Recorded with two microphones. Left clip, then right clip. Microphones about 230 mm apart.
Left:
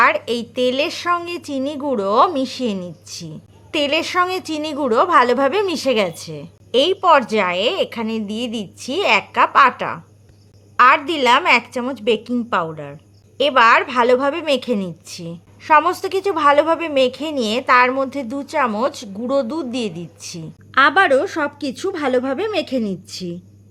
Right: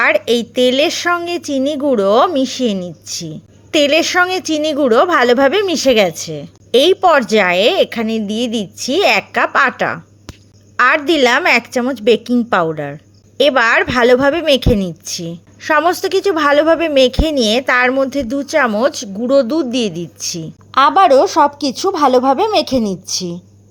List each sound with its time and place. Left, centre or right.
0.0 s a woman's voice: centre